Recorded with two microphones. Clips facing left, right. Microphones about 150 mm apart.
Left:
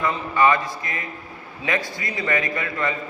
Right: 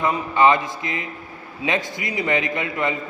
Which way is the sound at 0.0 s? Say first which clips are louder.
Right 2 dB; 20° right (ahead or behind).